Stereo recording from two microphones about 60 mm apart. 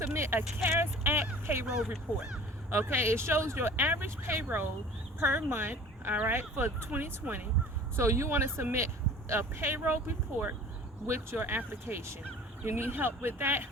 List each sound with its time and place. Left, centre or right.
0.0 s speech: right
1.6 s speech: centre
2.1 s speech: right
7.9 s speech: right